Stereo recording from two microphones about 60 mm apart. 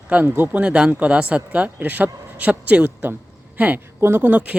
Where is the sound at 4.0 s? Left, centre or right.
Right.